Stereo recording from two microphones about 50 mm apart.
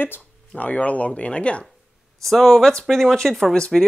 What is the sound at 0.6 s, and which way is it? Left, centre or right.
Speech, left.